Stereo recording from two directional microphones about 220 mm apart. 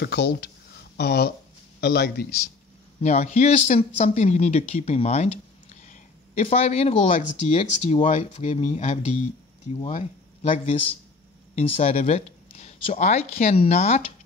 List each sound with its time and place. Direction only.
0.0 s a man's voice: 50° left (ahead or behind)
3.0 s a man's voice: 30° left (ahead or behind)